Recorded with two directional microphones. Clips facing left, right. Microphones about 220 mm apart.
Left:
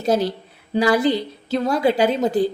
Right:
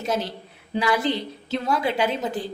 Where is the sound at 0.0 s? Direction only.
35° left (ahead or behind).